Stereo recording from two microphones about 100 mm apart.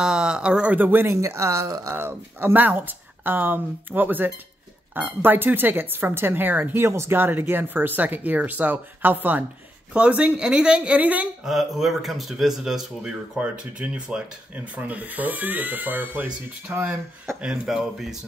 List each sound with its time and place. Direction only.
0.0 s speech: 10° right (ahead or behind)
11.4 s speech: centre (ahead or behind)